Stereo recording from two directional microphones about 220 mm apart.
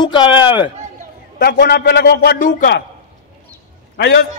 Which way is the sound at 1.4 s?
45° left (ahead or behind).